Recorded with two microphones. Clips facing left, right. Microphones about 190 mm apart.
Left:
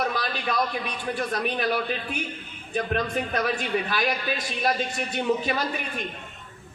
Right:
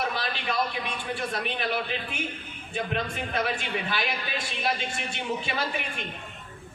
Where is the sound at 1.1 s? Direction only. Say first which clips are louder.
Left 4 dB; 45° left (ahead or behind).